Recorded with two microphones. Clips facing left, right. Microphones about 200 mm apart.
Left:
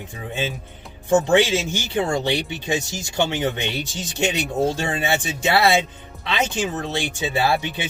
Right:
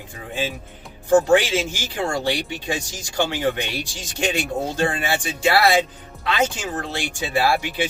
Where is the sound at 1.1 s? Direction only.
25° left (ahead or behind).